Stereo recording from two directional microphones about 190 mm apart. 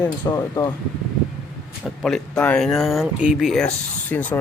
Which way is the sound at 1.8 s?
Centre (ahead or behind).